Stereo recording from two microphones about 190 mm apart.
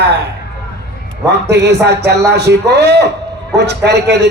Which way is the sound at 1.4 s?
60° right (ahead or behind).